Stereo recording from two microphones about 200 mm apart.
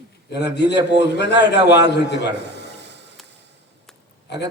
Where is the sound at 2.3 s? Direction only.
60° right (ahead or behind).